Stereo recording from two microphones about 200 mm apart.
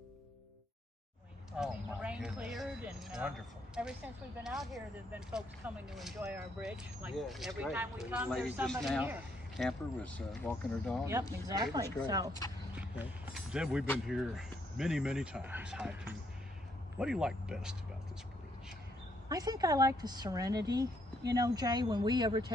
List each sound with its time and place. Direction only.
1.6 s speech: 5° right (ahead or behind)
9.7 s speech: 5° left (ahead or behind)
11.1 s speech: 15° right (ahead or behind)
12.7 s speech: 5° right (ahead or behind)
19.2 s speech: 20° right (ahead or behind)